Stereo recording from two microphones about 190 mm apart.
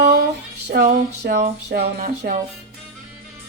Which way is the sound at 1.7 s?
50° right (ahead or behind).